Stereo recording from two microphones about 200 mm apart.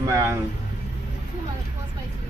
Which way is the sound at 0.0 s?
15° right (ahead or behind).